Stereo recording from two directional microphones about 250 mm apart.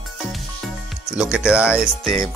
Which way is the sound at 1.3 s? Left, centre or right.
Centre.